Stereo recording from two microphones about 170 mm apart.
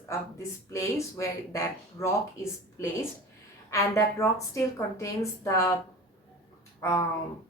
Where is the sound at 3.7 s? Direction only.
20° left (ahead or behind).